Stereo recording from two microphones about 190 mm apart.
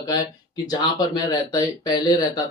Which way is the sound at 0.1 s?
20° left (ahead or behind).